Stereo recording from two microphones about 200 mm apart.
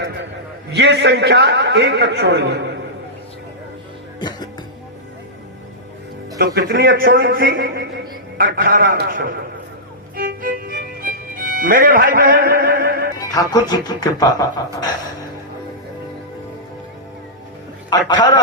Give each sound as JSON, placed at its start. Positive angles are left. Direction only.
{"t": 0.7, "sound": "a man's voice", "side_deg": -60}
{"t": 4.2, "sound": "speech", "side_deg": 20}
{"t": 6.4, "sound": "a man's voice", "side_deg": -50}
{"t": 10.2, "sound": "music", "side_deg": -45}
{"t": 13.1, "sound": "speech", "side_deg": 15}